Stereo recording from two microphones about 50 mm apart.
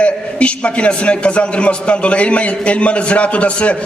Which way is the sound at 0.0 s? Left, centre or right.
Left.